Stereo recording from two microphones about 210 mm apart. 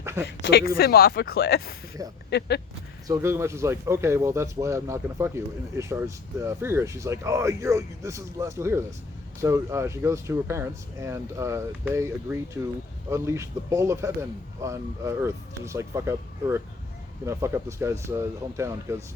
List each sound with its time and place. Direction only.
0.0 s a sound: 10° right (ahead or behind)
0.3 s speech: 55° left (ahead or behind)
2.0 s speech: 15° right (ahead or behind)